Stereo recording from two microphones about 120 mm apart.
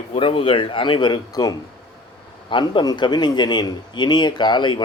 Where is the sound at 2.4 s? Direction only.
45° left (ahead or behind).